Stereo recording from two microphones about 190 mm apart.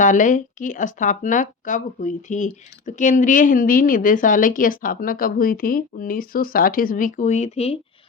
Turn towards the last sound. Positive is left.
turn(degrees=30)  # may be behind; listen again after turning